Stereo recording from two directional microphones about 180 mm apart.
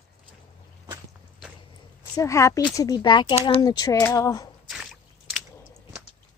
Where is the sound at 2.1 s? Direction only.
15° left (ahead or behind).